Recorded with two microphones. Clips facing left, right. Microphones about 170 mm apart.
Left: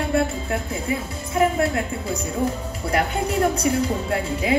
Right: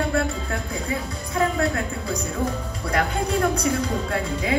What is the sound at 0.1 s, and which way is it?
Speech, 25° left (ahead or behind).